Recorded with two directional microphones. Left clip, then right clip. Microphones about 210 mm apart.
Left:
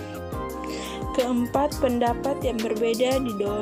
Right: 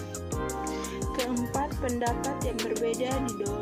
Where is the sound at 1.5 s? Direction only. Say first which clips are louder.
Left 10 dB; 45° left (ahead or behind).